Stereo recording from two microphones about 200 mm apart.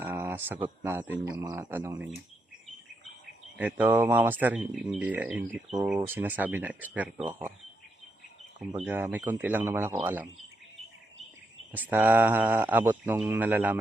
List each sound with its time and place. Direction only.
0.0 s speech: 10° right (ahead or behind)
3.6 s speech: 10° right (ahead or behind)
8.8 s speech: 10° right (ahead or behind)
11.7 s speech: 10° right (ahead or behind)